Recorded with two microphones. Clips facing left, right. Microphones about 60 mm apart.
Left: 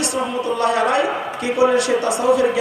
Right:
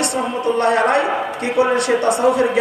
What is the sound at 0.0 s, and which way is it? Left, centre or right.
A woman's voice, right.